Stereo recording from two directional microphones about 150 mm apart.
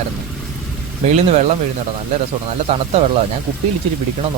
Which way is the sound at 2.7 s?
45° right (ahead or behind).